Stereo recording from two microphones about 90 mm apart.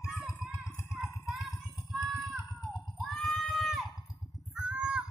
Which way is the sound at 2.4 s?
55° left (ahead or behind).